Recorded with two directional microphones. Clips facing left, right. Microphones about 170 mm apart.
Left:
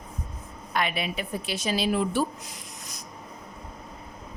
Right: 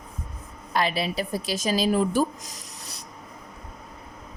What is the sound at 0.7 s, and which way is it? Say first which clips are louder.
A woman's voice: right 3 dB; 35° right (ahead or behind).